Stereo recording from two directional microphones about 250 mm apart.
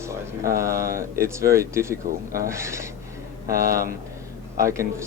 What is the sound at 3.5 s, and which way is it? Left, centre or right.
Speech, right.